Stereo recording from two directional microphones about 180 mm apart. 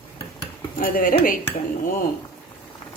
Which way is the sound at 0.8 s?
50° left (ahead or behind).